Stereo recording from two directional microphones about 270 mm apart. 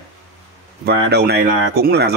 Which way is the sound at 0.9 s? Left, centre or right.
Right.